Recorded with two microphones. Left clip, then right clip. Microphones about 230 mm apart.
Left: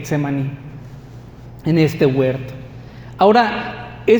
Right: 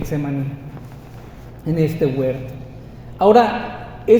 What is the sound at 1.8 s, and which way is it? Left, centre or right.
A woman's voice, left.